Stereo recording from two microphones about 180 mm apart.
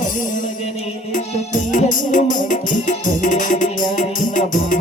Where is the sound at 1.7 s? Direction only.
45° left (ahead or behind).